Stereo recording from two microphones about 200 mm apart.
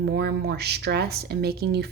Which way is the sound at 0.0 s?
55° right (ahead or behind).